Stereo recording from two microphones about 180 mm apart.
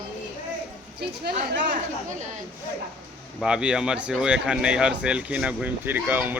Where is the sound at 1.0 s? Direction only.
65° right (ahead or behind).